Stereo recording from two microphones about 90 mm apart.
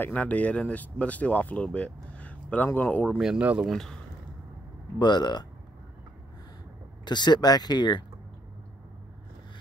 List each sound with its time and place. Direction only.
0.0 s speech: 15° left (ahead or behind)
3.2 s speech: 5° right (ahead or behind)
4.9 s speech: 55° left (ahead or behind)
7.1 s speech: 55° left (ahead or behind)